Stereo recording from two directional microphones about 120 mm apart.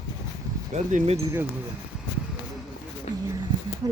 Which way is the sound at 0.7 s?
80° right.